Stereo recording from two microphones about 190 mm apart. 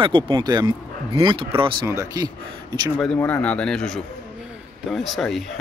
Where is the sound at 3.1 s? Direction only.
10° left (ahead or behind).